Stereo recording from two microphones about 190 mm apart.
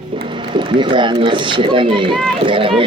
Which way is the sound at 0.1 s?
30° right (ahead or behind).